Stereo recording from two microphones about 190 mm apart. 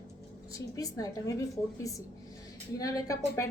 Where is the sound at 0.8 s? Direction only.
20° left (ahead or behind).